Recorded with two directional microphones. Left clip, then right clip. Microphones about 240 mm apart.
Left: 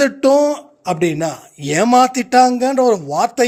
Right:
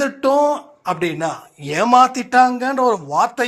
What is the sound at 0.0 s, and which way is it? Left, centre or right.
Speech, left.